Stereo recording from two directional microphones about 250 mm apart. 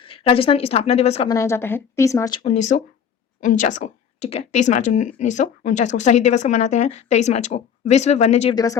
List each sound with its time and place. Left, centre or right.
0.3 s speech: left
1.3 s a woman's voice: centre
2.4 s speech: left
8.5 s a woman's voice: centre